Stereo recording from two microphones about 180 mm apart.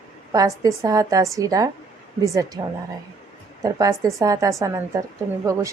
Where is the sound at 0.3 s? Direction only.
20° right (ahead or behind).